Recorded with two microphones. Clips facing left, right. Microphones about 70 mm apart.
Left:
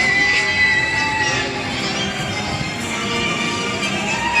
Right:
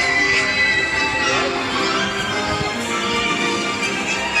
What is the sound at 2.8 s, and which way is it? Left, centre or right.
Music, centre.